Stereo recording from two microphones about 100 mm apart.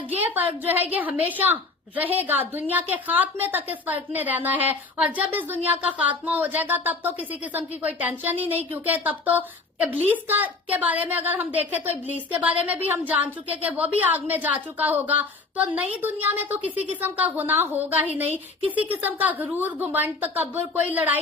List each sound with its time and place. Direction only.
0.1 s a woman's voice: 20° right (ahead or behind)